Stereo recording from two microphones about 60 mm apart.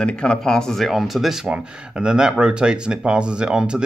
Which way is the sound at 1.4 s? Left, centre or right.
Centre.